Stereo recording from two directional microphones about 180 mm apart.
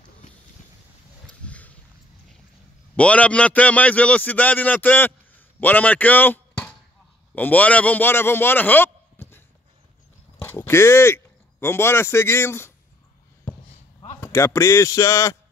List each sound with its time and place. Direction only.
1.4 s a sound: 10° left (ahead or behind)
3.0 s a man's voice: 5° left (ahead or behind)
10.4 s speech: 15° left (ahead or behind)
14.3 s a man's voice: 15° left (ahead or behind)